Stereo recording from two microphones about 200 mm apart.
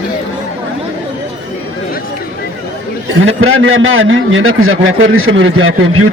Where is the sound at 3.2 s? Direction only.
90° right.